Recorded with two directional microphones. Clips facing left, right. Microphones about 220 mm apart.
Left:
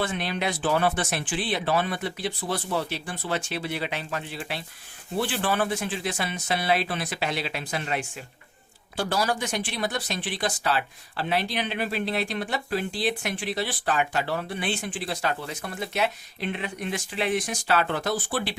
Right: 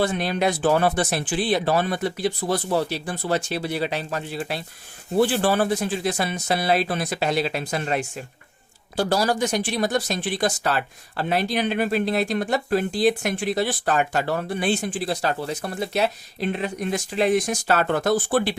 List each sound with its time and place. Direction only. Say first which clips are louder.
0.0 s speech: right 6 dB; 40° right (ahead or behind)